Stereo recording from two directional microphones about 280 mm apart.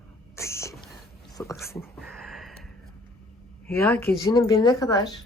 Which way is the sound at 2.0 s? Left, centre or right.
Centre.